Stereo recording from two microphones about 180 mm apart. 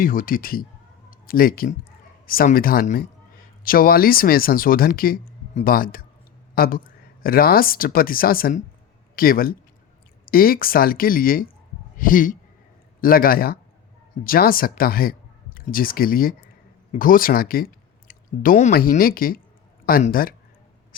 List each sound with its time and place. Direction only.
0.0 s speech: 50° left (ahead or behind)